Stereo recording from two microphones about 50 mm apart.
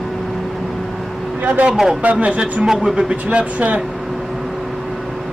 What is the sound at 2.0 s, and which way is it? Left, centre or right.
Speech, right.